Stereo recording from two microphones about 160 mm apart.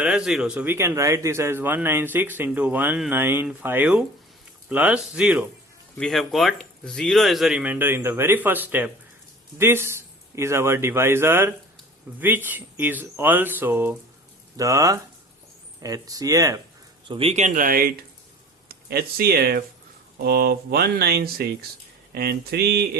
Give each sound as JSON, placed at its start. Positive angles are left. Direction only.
{"t": 0.0, "sound": "speech", "side_deg": -5}
{"t": 17.1, "sound": "speech", "side_deg": -35}
{"t": 22.1, "sound": "mantra", "side_deg": -80}